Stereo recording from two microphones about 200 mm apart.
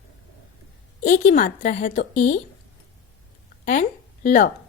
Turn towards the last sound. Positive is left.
turn(degrees=45)  # may be behind; listen again after turning